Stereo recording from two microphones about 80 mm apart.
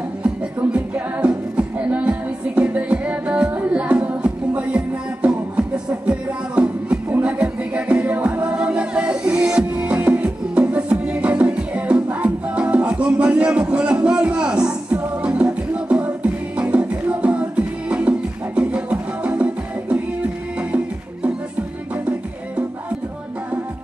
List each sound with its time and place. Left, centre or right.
0.7 s music: centre